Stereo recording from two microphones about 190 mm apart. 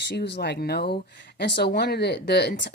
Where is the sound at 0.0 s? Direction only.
65° left (ahead or behind).